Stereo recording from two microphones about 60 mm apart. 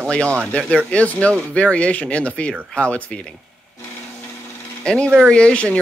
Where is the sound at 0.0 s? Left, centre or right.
Centre.